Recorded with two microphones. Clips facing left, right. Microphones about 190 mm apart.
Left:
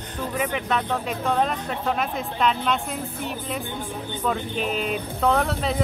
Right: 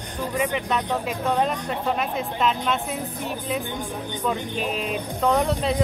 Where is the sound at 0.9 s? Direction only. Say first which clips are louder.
Right 1 dB; 15° right (ahead or behind).